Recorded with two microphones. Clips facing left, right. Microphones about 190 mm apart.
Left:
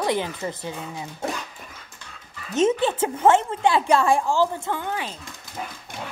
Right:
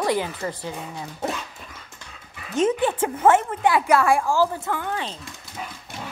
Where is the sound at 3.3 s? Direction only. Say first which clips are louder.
Even; 25° left (ahead or behind).